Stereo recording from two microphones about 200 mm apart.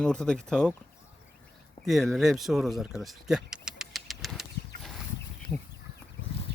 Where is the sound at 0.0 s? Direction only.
5° left (ahead or behind).